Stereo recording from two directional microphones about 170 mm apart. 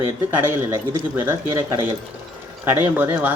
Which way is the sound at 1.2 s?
15° right (ahead or behind).